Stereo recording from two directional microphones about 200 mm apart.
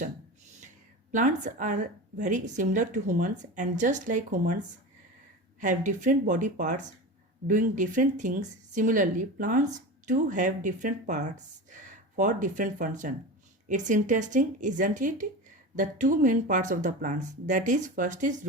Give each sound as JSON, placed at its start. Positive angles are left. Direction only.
{"t": 1.1, "sound": "a woman's voice", "side_deg": -40}
{"t": 5.5, "sound": "a woman's voice", "side_deg": -40}